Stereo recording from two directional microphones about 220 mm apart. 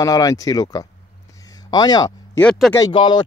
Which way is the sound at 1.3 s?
15° left (ahead or behind).